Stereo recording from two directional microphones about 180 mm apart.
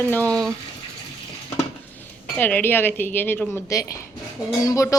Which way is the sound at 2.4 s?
10° left (ahead or behind).